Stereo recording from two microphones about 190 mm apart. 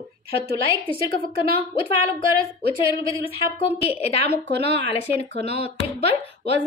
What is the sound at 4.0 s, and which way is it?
A woman's voice, 35° left (ahead or behind).